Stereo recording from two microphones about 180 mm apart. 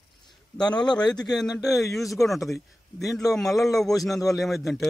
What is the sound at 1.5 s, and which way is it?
A man's voice, centre (ahead or behind).